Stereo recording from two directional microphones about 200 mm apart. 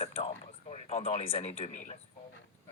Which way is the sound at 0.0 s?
30° left (ahead or behind).